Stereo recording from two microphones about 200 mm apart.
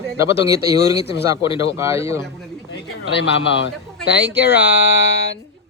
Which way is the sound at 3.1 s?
60° left (ahead or behind).